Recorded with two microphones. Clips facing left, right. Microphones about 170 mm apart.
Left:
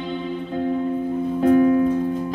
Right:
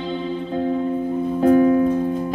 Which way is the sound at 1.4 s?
30° right (ahead or behind).